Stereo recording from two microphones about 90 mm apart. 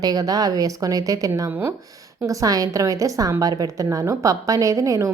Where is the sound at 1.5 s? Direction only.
20° right (ahead or behind).